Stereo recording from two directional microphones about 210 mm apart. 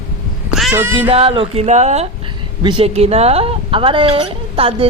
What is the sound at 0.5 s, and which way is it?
Cat, 5° right (ahead or behind).